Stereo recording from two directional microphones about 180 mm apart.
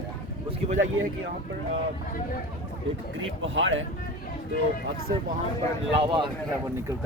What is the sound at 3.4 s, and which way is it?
Speech, 90° right.